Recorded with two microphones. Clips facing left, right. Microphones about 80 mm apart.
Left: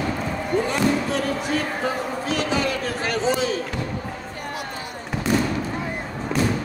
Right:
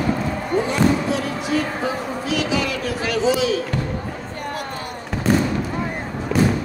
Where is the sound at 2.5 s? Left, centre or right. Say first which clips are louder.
Right 1 dB; left.